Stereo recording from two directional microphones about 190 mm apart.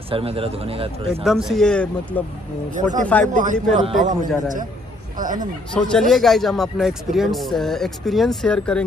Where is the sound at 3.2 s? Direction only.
40° right (ahead or behind).